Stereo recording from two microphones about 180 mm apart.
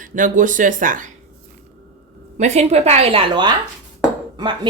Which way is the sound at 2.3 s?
40° right (ahead or behind).